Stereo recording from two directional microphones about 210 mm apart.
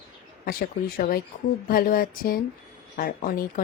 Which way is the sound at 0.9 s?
45° left (ahead or behind).